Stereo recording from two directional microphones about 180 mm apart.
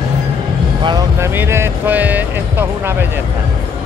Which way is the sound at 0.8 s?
25° right (ahead or behind).